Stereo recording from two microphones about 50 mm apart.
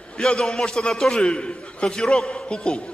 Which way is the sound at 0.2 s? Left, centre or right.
Centre.